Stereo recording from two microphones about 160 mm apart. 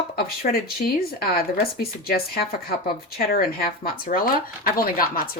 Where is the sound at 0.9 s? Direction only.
70° left (ahead or behind).